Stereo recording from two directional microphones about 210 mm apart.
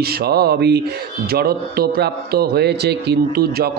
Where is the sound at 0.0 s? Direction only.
50° right (ahead or behind).